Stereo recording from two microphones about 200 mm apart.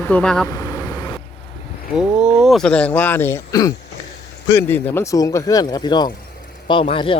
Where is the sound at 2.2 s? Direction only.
Centre (ahead or behind); by 7.1 s 25° left (ahead or behind).